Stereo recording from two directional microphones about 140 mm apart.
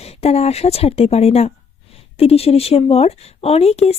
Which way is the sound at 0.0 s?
45° left (ahead or behind).